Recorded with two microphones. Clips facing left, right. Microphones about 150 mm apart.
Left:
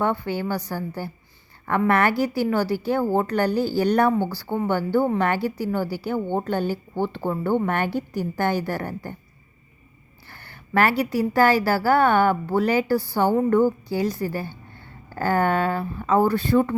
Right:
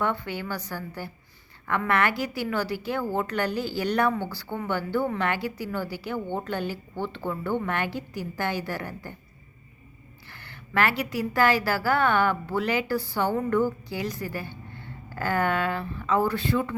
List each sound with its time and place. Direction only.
0.0 s a woman's voice: 35° left (ahead or behind)
10.3 s a woman's voice: 40° left (ahead or behind)